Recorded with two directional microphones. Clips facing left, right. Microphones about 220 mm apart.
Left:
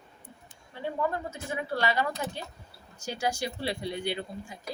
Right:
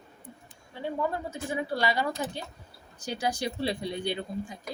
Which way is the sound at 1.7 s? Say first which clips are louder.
Left 1 dB; 15° right (ahead or behind).